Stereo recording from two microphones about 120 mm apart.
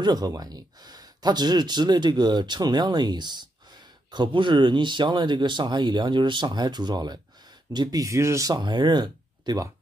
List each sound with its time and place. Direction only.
0.0 s speech: 30° right (ahead or behind)